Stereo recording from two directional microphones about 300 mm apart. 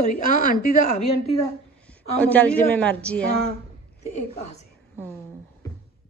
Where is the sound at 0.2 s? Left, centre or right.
Left.